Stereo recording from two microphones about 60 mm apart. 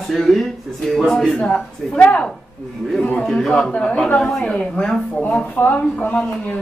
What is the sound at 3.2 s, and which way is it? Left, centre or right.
A woman's voice, centre.